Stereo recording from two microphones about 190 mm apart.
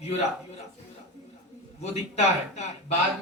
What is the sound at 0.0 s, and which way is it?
Speech, 35° left (ahead or behind).